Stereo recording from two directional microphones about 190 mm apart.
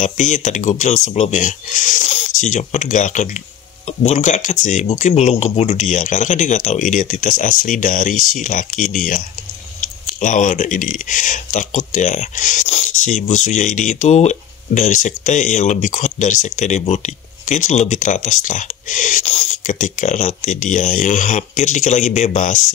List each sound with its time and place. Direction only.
0.0 s speech: 40° left (ahead or behind)
10.2 s speech: 40° left (ahead or behind)